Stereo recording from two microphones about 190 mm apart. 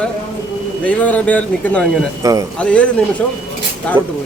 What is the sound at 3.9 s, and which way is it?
Speech, 25° right (ahead or behind).